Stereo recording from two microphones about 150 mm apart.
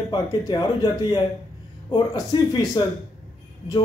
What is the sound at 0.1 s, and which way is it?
Speech, 25° left (ahead or behind).